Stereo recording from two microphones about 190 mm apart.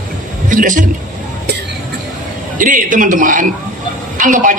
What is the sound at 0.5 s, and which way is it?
Speech, 45° right (ahead or behind).